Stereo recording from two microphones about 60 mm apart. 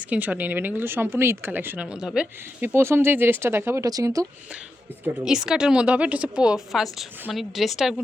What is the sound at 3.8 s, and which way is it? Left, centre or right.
Speech, right.